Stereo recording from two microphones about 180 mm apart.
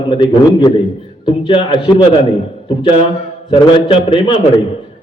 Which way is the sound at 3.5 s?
30° left (ahead or behind).